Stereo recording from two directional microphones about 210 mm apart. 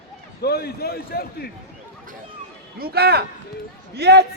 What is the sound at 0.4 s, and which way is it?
Speech, 50° left (ahead or behind).